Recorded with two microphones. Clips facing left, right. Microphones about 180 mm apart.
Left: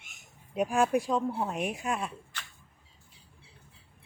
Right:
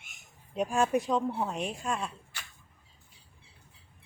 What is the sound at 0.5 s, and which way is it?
Speech, 5° left (ahead or behind).